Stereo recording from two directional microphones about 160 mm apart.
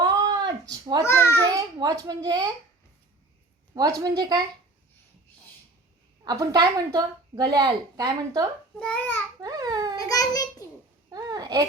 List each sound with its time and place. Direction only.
0.0 s a sound: 25° right (ahead or behind)
3.8 s a woman's voice: 25° right (ahead or behind)
6.2 s a woman's voice: 25° right (ahead or behind)
8.8 s a child's voice: 10° left (ahead or behind)
9.4 s babbling: 25° right (ahead or behind)
10.0 s a child's voice: 20° left (ahead or behind)
11.1 s babbling: 25° right (ahead or behind)